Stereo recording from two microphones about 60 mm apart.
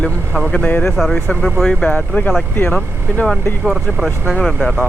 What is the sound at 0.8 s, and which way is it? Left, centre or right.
Speech, centre.